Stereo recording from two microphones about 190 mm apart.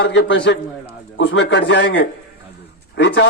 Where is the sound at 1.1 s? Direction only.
80° left.